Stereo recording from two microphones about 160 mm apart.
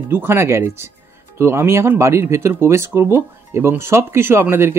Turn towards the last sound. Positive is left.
turn(degrees=-15)  # may be behind; listen again after turning